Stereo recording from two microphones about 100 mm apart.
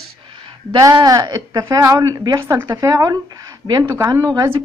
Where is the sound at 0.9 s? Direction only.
40° right (ahead or behind); by 4.1 s 25° right (ahead or behind).